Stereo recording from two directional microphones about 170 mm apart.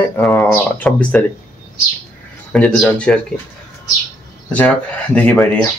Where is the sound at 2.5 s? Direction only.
5° left (ahead or behind).